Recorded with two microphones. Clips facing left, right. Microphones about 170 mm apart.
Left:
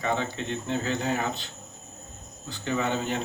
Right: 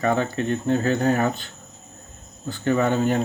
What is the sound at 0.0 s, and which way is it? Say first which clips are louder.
Speech: right 7 dB; 50° right (ahead or behind).